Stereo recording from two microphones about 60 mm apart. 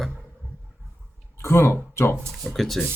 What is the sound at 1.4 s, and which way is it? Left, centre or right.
Speech, left.